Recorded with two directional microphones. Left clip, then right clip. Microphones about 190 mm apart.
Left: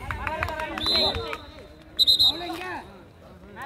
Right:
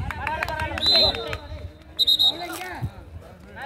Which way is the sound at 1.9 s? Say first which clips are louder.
Even; centre (ahead or behind).